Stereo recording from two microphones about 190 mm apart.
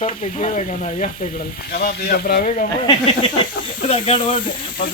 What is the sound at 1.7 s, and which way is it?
Speech, 55° left (ahead or behind).